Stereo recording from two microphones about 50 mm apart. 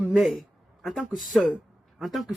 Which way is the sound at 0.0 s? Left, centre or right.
Right.